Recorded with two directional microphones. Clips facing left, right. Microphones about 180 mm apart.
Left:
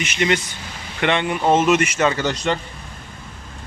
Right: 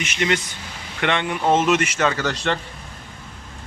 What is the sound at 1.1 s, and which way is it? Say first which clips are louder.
Speech: left 2 dB; 5° left (ahead or behind).